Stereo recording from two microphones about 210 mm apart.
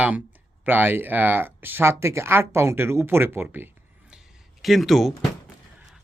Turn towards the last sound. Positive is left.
turn(degrees=0)  # may be behind; listen again after turning